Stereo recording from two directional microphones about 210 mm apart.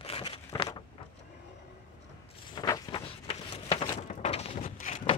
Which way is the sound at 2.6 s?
20° left (ahead or behind).